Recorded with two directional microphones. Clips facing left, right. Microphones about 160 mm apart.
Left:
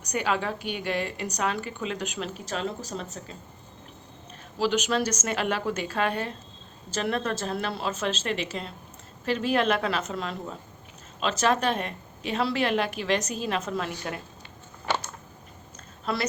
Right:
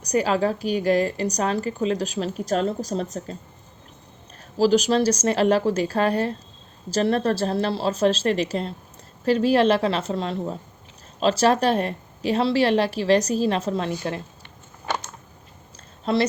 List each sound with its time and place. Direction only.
0.0 s a woman's voice: 35° right (ahead or behind)
4.5 s a woman's voice: 35° right (ahead or behind)
16.1 s speech: 25° right (ahead or behind)